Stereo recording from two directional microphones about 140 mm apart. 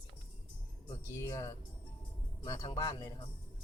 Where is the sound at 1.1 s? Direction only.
20° left (ahead or behind).